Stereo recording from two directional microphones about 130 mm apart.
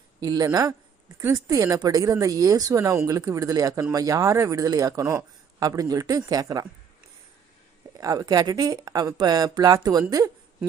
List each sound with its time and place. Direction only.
0.2 s speech: 30° right (ahead or behind)
7.9 s speech: 25° right (ahead or behind)